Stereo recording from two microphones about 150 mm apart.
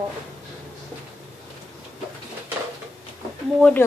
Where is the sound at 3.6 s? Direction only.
10° left (ahead or behind).